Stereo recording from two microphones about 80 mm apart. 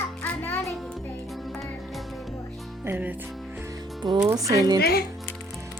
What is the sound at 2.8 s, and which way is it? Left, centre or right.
Speech, right.